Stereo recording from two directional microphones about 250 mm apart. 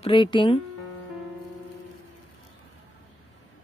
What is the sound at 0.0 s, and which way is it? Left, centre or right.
Speech, centre.